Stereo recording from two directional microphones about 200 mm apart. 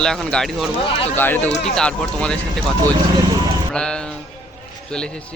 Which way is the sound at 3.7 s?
5° left (ahead or behind).